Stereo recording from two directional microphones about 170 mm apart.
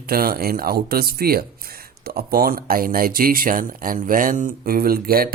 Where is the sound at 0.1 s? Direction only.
60° right (ahead or behind).